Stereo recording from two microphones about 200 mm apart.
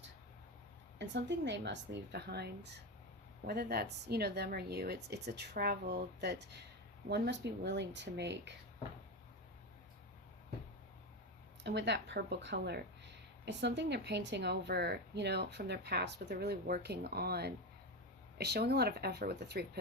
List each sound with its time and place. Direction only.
0.9 s speech: 60° right (ahead or behind)
11.6 s speech: 60° right (ahead or behind)